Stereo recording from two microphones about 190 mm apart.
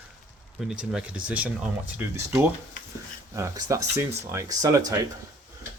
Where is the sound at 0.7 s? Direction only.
5° right (ahead or behind).